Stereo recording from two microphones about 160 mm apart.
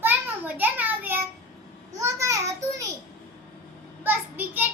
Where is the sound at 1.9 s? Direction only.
20° right (ahead or behind).